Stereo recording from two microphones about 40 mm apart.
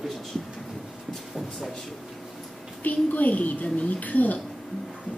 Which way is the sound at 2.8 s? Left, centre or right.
Left.